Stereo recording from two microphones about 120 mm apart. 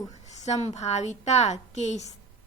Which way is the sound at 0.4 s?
70° left (ahead or behind).